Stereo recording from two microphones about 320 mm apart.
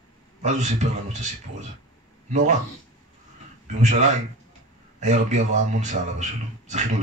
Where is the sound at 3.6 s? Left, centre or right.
Right.